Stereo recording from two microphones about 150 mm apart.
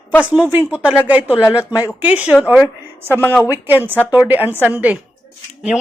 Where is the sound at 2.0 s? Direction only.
10° right (ahead or behind).